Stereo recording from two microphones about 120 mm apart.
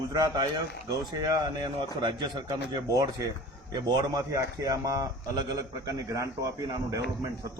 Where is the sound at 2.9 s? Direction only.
30° right (ahead or behind).